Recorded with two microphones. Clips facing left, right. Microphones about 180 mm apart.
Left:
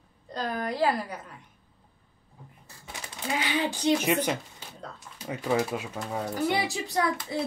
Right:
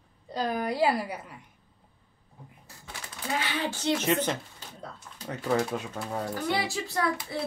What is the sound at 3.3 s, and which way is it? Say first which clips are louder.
Speech: left 2 dB; 15° left (ahead or behind).